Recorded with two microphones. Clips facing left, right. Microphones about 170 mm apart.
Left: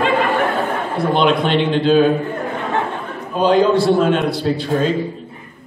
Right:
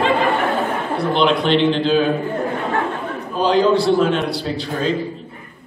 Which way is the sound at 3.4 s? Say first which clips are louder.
Left 2 dB; 50° left (ahead or behind).